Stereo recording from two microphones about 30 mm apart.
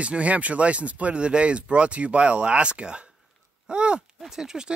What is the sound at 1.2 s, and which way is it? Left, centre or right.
Speech, right.